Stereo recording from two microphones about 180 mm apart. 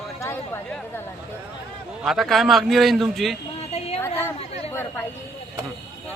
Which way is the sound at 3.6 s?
35° left (ahead or behind).